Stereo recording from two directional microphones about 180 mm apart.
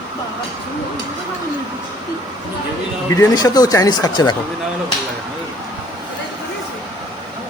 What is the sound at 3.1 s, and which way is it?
Speech, 20° left (ahead or behind).